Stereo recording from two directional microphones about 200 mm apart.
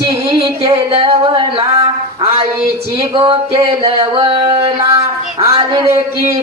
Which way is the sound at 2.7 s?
20° right (ahead or behind).